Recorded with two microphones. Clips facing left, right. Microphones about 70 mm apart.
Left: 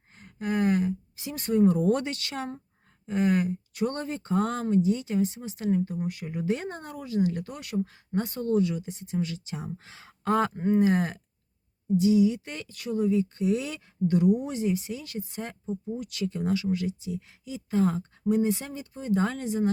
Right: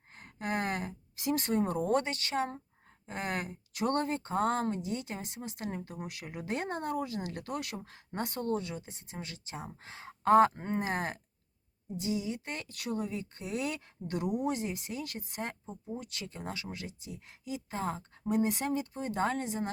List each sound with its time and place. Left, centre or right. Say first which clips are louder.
0.2 s speech: left 6 dB; right
3.1 s speech: left 11 dB; right
5.8 s speech: left 10 dB; right
6.6 s speech: right 3 dB; right
15.6 s speech: left 8 dB; right
18.3 s speech: left 4 dB; right